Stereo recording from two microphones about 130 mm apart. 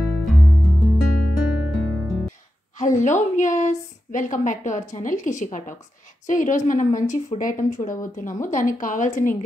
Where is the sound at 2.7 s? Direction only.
75° left (ahead or behind).